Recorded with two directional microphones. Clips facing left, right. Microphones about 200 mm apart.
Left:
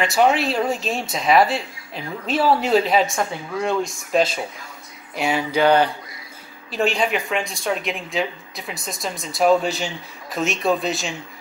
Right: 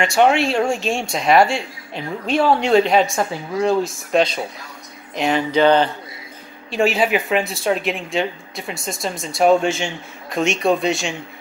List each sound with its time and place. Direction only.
0.0 s speech: centre (ahead or behind)
6.7 s speech: centre (ahead or behind)